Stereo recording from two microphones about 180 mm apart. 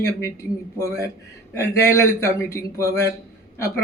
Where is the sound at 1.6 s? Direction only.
15° left (ahead or behind).